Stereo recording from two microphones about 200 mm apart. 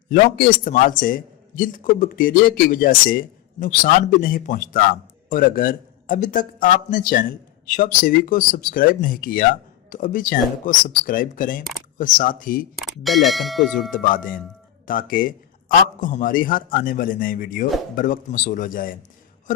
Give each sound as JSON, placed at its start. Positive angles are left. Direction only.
{"t": 0.1, "sound": "a man's voice", "side_deg": 45}
{"t": 12.8, "sound": "speech", "side_deg": 0}
{"t": 13.9, "sound": "a man's voice", "side_deg": 45}